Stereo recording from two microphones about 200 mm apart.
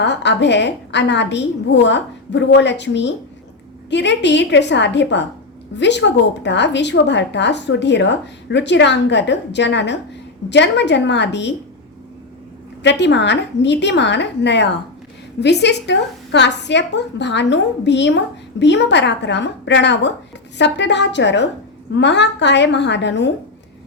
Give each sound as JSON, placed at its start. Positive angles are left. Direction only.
{"t": 0.0, "sound": "a woman's voice", "side_deg": 60}
{"t": 12.8, "sound": "a woman's voice", "side_deg": 60}